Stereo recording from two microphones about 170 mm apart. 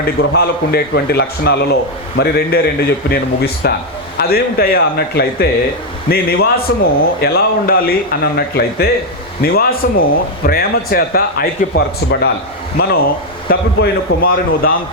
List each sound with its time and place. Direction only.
0.0 s a man's voice: 65° left (ahead or behind)